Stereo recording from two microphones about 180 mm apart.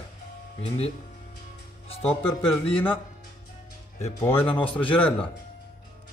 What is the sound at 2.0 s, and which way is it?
Speech, 10° left (ahead or behind).